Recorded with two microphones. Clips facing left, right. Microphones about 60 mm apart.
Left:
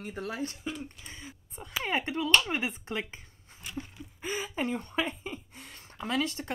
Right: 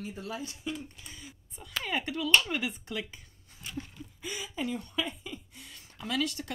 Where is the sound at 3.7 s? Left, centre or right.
Left.